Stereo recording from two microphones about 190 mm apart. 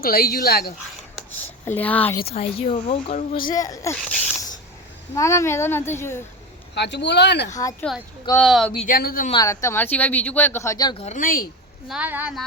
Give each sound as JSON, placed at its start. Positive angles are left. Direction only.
{"t": 0.0, "sound": "speech", "side_deg": 55}
{"t": 1.6, "sound": "speech", "side_deg": 10}
{"t": 2.2, "sound": "speech", "side_deg": 30}
{"t": 3.5, "sound": "speech", "side_deg": 20}
{"t": 5.1, "sound": "speech", "side_deg": 15}
{"t": 6.7, "sound": "speech", "side_deg": 65}
{"t": 7.5, "sound": "speech", "side_deg": 15}
{"t": 8.4, "sound": "speech", "side_deg": 0}
{"t": 8.9, "sound": "speech", "side_deg": 50}
{"t": 9.3, "sound": "speech", "side_deg": 15}
{"t": 11.0, "sound": "speech", "side_deg": 40}
{"t": 11.9, "sound": "a woman's voice", "side_deg": -5}